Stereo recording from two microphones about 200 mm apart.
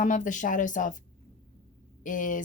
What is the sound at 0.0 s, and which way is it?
Speech, 40° left (ahead or behind).